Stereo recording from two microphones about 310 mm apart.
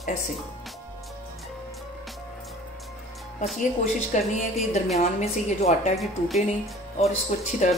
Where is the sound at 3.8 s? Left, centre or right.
Left.